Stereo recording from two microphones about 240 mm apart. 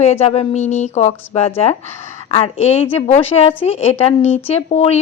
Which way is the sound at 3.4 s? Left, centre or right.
Left.